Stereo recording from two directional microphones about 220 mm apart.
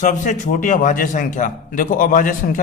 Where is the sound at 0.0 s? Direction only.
35° left (ahead or behind).